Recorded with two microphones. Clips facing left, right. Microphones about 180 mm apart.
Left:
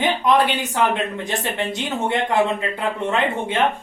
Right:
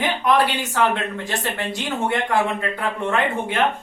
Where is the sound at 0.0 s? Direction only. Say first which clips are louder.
Left 1 dB; 20° left (ahead or behind).